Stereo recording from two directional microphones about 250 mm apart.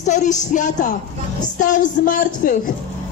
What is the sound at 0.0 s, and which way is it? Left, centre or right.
A woman's voice, left.